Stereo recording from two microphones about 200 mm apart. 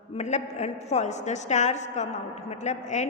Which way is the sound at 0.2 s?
35° left (ahead or behind).